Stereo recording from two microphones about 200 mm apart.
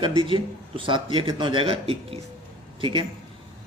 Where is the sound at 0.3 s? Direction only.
25° right (ahead or behind).